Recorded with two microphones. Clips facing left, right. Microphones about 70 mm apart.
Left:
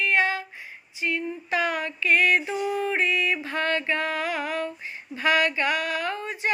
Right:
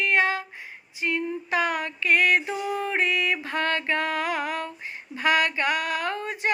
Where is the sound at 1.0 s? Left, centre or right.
Right.